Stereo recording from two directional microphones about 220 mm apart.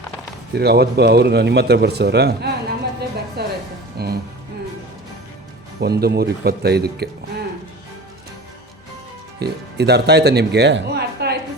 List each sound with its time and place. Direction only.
0.5 s speech: 45° right (ahead or behind)
3.4 s music: 45° right (ahead or behind)
5.8 s speech: 45° right (ahead or behind)
9.4 s speech: 50° right (ahead or behind)